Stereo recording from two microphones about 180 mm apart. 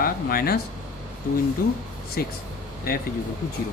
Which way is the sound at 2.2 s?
55° left (ahead or behind).